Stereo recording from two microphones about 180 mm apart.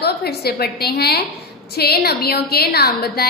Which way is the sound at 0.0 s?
65° left (ahead or behind).